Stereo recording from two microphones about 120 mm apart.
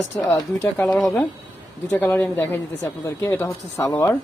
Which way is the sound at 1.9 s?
15° left (ahead or behind).